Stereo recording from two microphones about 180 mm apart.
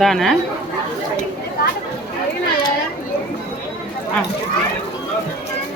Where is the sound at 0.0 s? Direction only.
Centre (ahead or behind).